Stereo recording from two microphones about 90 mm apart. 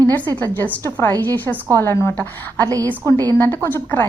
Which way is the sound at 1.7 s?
30° left (ahead or behind).